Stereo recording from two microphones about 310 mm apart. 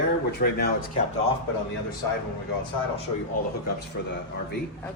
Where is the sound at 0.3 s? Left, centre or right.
Left.